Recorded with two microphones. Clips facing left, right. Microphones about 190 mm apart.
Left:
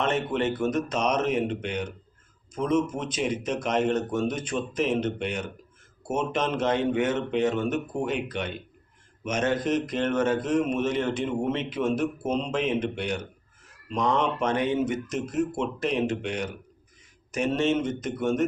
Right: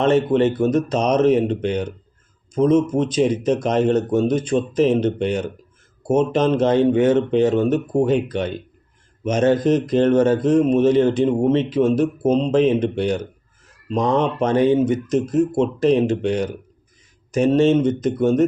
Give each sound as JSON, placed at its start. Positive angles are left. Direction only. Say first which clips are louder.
{"t": 0.0, "sound": "a man's voice", "louder": "right 10 dB", "side_deg": -35}